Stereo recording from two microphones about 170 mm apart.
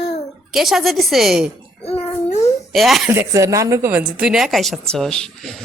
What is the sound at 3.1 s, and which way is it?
A woman's voice, 15° right (ahead or behind).